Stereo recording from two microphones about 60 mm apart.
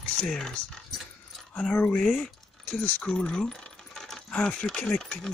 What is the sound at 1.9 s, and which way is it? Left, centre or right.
Speech, centre.